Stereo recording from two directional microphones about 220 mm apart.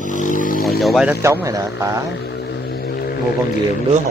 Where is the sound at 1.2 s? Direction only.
15° right (ahead or behind).